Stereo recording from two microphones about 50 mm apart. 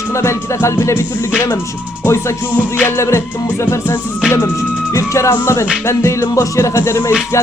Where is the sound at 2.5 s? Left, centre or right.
Right.